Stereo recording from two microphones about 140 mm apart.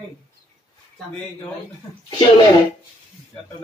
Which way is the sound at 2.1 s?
30° left (ahead or behind).